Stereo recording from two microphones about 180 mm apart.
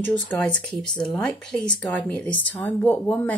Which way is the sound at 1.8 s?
5° left (ahead or behind).